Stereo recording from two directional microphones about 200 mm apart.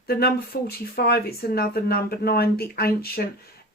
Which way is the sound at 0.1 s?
50° left (ahead or behind).